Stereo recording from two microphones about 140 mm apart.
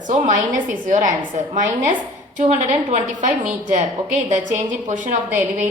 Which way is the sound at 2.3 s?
50° right (ahead or behind).